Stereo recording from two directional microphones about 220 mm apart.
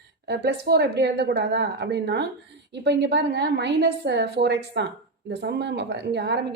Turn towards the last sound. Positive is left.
turn(degrees=-50)  # may be behind; listen again after turning